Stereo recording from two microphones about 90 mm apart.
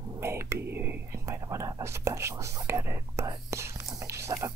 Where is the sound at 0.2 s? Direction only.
30° right (ahead or behind).